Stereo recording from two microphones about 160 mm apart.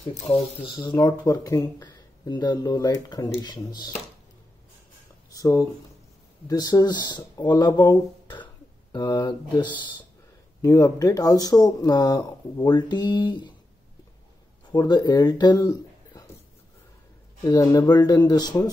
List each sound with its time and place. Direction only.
0.0 s speech: 35° left (ahead or behind)
0.7 s speech: 25° left (ahead or behind)
5.3 s speech: 20° left (ahead or behind)
9.0 s speech: 15° left (ahead or behind)
10.6 s speech: 20° left (ahead or behind)
14.7 s speech: 25° left (ahead or behind)
17.4 s speech: 20° left (ahead or behind)